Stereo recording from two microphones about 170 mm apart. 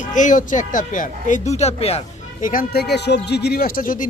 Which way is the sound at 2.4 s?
55° left (ahead or behind).